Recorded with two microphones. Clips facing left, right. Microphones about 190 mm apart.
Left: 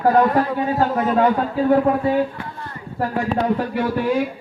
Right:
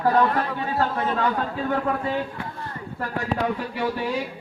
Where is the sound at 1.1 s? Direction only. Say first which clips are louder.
Left 7 dB; 40° left (ahead or behind).